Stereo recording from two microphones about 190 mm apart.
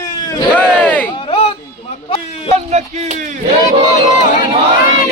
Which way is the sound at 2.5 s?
35° right (ahead or behind).